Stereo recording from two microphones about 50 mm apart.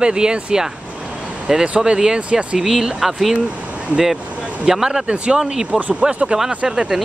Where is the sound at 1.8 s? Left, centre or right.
Centre.